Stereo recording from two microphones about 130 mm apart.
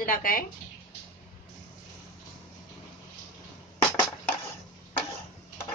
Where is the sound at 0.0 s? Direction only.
90° left.